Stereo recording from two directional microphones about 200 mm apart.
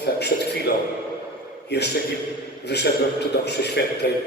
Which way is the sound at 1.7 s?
55° left (ahead or behind).